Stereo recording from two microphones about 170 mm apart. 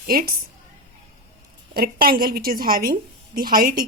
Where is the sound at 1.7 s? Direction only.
60° right (ahead or behind).